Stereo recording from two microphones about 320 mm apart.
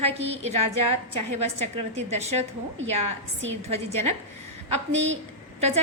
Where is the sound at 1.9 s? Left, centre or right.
Centre.